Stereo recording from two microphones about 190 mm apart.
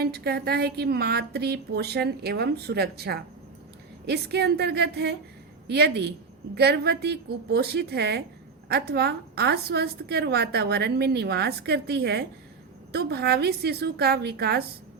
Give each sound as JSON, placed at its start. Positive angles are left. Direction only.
{"t": 0.0, "sound": "a woman's voice", "side_deg": -55}